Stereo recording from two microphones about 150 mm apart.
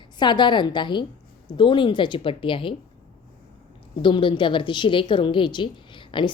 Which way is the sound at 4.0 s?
35° left (ahead or behind).